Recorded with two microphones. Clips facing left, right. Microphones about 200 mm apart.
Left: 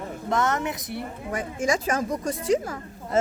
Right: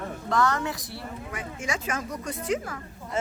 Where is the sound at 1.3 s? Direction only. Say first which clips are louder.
Left 9 dB; 40° left (ahead or behind).